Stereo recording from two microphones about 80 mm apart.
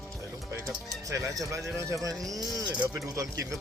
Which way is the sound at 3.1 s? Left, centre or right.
Right.